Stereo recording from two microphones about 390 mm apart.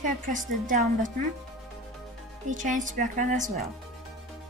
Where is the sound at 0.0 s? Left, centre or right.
Centre.